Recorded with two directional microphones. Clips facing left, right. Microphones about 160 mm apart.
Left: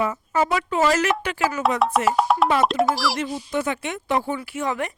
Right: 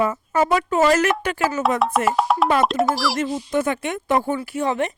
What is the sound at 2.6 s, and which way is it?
Speech, centre (ahead or behind).